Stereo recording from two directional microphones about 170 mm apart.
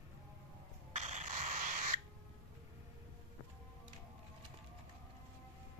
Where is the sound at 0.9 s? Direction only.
45° right (ahead or behind).